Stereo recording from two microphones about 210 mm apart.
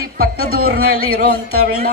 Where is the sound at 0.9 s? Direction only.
90° right.